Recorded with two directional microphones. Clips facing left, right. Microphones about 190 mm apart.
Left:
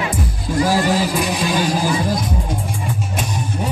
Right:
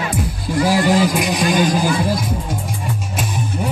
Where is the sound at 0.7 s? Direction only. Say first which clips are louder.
Right 4 dB; 15° right (ahead or behind).